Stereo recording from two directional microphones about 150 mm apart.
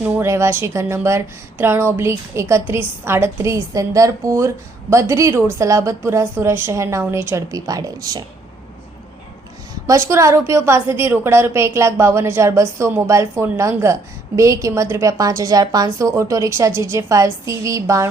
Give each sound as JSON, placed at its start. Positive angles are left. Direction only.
{"t": 0.0, "sound": "a woman's voice", "side_deg": -15}
{"t": 9.8, "sound": "a woman's voice", "side_deg": -20}